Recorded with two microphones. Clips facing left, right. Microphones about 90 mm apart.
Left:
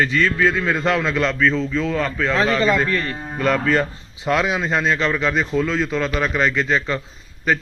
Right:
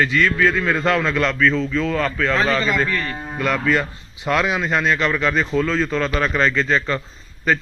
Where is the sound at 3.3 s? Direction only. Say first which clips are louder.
Left 1 dB; 35° left (ahead or behind).